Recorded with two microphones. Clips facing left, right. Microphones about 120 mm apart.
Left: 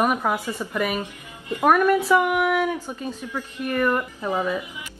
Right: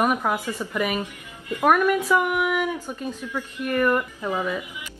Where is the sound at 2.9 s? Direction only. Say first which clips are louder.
Even; 10° left (ahead or behind).